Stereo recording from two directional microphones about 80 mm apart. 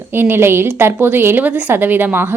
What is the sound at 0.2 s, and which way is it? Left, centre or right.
A woman's voice, right.